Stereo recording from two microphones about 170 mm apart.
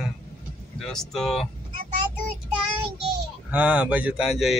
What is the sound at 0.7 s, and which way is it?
Speech, centre (ahead or behind).